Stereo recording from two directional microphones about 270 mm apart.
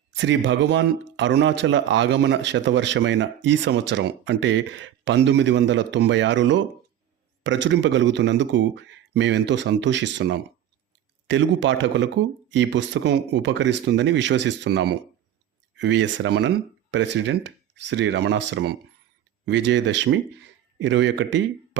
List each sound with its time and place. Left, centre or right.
0.2 s speech: right